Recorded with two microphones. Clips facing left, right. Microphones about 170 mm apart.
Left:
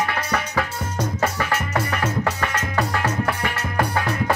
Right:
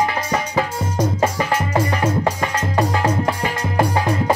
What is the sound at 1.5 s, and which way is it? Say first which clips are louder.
Music: right 4 dB; 30° right (ahead or behind).